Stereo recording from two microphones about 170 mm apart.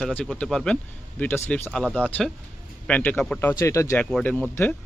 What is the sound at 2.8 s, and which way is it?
Speech, 10° left (ahead or behind).